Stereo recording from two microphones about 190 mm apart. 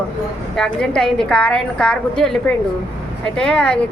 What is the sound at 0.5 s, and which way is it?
A woman's voice, 5° left (ahead or behind).